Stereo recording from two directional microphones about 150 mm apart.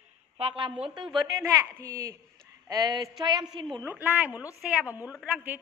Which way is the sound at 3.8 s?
15° right (ahead or behind).